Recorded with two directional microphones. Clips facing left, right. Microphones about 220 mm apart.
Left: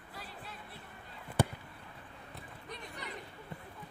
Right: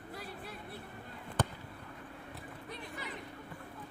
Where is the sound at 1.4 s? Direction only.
10° left (ahead or behind).